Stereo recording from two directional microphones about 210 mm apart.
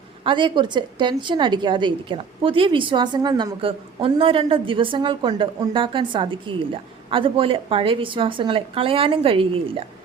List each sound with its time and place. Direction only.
0.3 s a woman's voice: 20° right (ahead or behind)